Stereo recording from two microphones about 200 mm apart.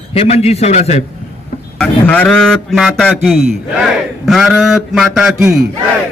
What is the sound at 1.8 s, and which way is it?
A man's voice, 5° left (ahead or behind).